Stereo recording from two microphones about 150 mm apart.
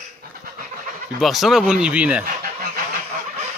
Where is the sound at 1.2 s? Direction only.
Centre (ahead or behind).